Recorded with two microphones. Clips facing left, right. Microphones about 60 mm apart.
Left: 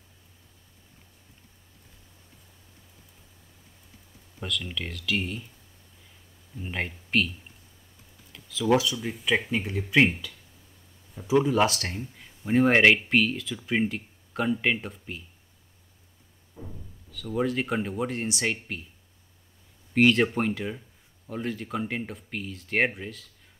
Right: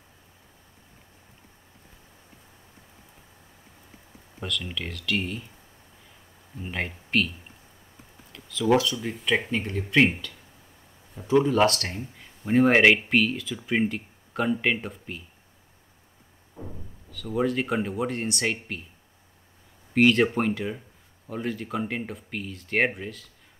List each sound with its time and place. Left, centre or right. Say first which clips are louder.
4.4 s speech: right 1 dB; centre
6.6 s speech: right 1 dB; centre
7.1 s a sound: even; centre
8.3 s speech: right 1 dB; centre
11.2 s speech: right 2 dB; centre
16.5 s a sound: right 3 dB; right
17.1 s speech: right 2 dB; centre
19.9 s speech: right 1 dB; centre